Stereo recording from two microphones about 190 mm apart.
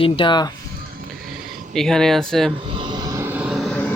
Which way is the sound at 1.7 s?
Centre (ahead or behind).